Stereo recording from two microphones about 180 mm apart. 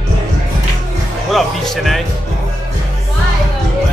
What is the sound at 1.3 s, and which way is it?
Music, centre (ahead or behind).